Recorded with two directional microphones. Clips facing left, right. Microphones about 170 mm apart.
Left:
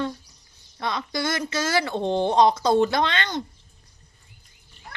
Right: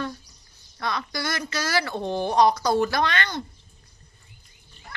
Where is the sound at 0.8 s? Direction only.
20° left (ahead or behind).